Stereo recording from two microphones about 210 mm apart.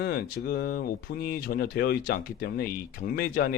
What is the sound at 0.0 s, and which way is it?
Speech, 50° left (ahead or behind).